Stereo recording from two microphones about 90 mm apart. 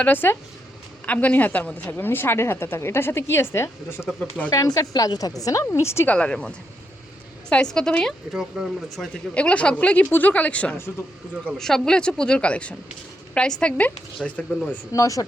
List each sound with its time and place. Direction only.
0.0 s a woman's voice: 20° left (ahead or behind)
4.5 s a woman's voice: 45° left (ahead or behind)
6.1 s speech: 10° left (ahead or behind)
7.5 s speech: 10° left (ahead or behind)
8.3 s speech: centre (ahead or behind)
9.3 s speech: 15° left (ahead or behind)
14.9 s a woman's voice: 40° left (ahead or behind)